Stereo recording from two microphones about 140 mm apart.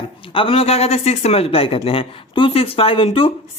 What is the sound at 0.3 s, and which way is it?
Speech, 40° left (ahead or behind).